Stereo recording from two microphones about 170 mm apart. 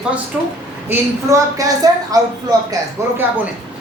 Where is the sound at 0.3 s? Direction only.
5° right (ahead or behind).